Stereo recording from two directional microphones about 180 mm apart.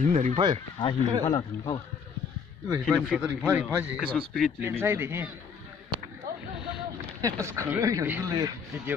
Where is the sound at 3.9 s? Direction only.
Centre (ahead or behind).